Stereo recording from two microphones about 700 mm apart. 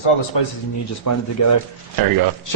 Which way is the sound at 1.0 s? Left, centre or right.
Left.